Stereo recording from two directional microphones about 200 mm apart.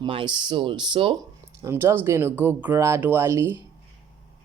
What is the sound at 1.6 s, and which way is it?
Speech, 15° right (ahead or behind).